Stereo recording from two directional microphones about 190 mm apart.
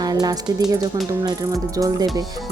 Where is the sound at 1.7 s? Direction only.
20° right (ahead or behind).